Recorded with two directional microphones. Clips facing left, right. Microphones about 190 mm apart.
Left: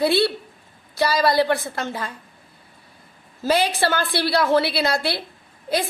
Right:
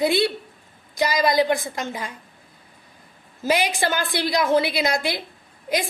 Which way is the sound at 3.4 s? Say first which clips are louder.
Left 2 dB; 15° right (ahead or behind).